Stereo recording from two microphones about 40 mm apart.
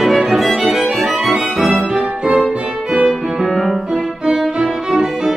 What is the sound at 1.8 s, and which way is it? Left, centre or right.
Music, right.